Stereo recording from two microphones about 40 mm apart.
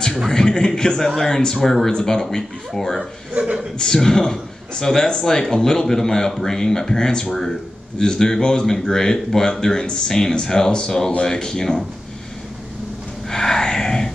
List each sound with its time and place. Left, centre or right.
0.3 s a man's voice: centre
1.9 s a man's voice: centre
13.3 s a sound: centre